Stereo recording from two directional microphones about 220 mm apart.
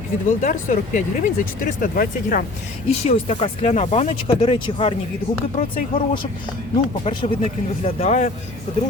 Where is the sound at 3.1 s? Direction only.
25° left (ahead or behind).